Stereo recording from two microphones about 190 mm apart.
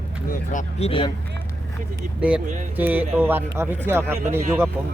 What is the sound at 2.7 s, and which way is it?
Speech, 10° right (ahead or behind).